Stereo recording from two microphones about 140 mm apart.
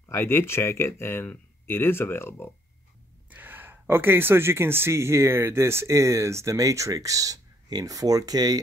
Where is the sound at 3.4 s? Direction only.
15° right (ahead or behind).